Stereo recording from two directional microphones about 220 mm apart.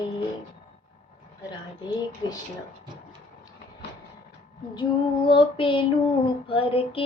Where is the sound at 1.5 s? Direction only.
20° left (ahead or behind).